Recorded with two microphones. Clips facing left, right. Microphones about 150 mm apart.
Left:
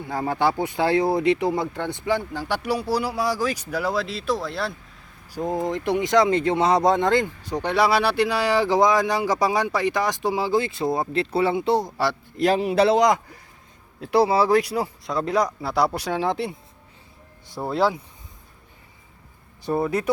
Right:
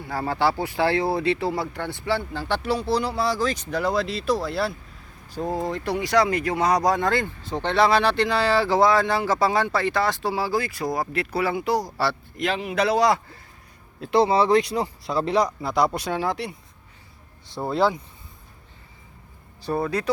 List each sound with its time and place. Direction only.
0.0 s speech: 20° left (ahead or behind); by 4.7 s centre (ahead or behind)
5.3 s speech: 15° left (ahead or behind)
13.0 s speech: 20° left (ahead or behind)
16.3 s speech: 25° left (ahead or behind)
17.6 s speech: 5° left (ahead or behind)
19.6 s speech: 20° left (ahead or behind)